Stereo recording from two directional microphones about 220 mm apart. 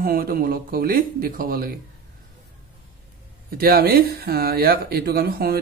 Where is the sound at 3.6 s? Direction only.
45° right (ahead or behind).